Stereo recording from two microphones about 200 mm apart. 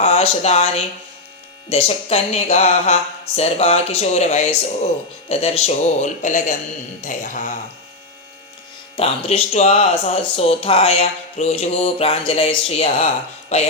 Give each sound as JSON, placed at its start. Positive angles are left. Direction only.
{"t": 0.0, "sound": "speech", "side_deg": 30}
{"t": 9.0, "sound": "speech", "side_deg": 30}